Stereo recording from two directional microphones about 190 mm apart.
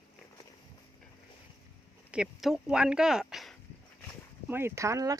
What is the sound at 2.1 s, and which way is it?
Speech, 5° right (ahead or behind).